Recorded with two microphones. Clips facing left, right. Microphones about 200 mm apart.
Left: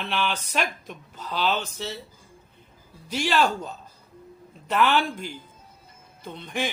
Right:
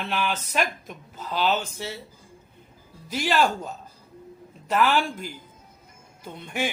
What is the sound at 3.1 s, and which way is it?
Speech, 45° right (ahead or behind).